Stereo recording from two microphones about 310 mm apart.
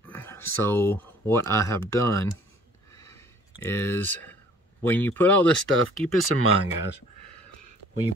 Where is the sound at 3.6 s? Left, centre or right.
Centre.